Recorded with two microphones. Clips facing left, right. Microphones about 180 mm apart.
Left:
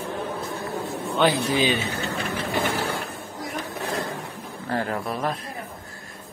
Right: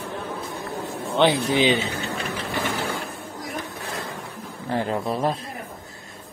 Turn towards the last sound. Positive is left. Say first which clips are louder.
# right 3 dB
turn(degrees=-25)  # may be behind; listen again after turning